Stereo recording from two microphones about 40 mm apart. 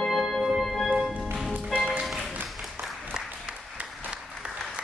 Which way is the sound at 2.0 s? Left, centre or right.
Centre.